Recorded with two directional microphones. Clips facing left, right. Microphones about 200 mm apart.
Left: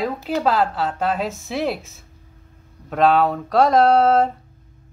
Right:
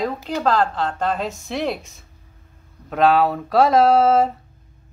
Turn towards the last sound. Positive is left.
turn(degrees=-5)  # may be behind; listen again after turning